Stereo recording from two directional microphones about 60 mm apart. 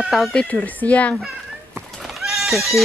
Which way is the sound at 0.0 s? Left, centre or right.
Centre.